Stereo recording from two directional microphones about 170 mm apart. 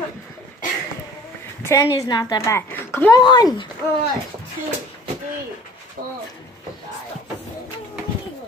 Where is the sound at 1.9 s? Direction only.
25° left (ahead or behind).